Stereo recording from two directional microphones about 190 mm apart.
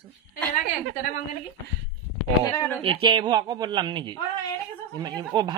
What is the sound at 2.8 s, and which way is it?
Speech, 30° right (ahead or behind).